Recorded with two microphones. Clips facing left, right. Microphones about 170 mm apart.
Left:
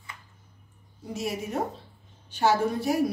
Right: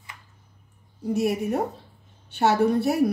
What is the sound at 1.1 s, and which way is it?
A woman's voice, 60° right (ahead or behind).